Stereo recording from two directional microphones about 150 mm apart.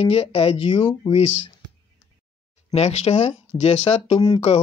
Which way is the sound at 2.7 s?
45° left (ahead or behind).